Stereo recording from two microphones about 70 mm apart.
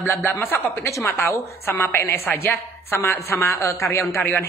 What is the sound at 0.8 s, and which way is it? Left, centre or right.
Speech, left.